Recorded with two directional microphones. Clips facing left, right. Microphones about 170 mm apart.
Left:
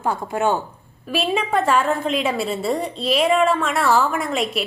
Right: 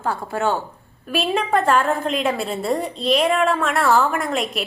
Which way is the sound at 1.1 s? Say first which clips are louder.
Right 1 dB; centre (ahead or behind).